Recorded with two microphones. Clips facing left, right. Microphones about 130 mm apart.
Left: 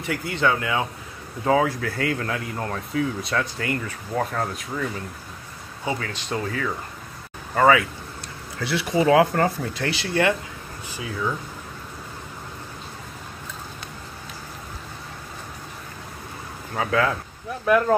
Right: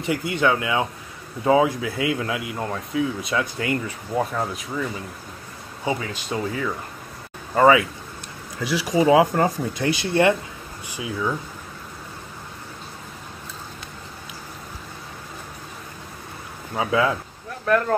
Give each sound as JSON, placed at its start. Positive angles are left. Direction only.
{"t": 0.0, "sound": "speech", "side_deg": -20}
{"t": 3.5, "sound": "speech", "side_deg": -20}
{"t": 4.2, "sound": "speech", "side_deg": -10}
{"t": 5.9, "sound": "speech", "side_deg": -15}
{"t": 16.7, "sound": "speech", "side_deg": -15}
{"t": 17.6, "sound": "speech", "side_deg": 5}